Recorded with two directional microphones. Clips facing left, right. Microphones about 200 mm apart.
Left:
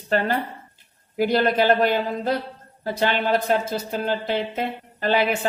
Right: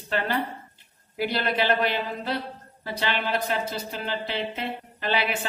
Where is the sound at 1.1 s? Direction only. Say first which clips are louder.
Left 7 dB; 45° left (ahead or behind).